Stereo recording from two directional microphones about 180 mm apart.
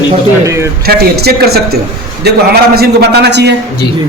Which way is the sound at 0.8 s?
60° right (ahead or behind).